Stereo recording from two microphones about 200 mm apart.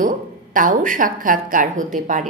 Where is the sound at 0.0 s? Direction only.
40° right (ahead or behind).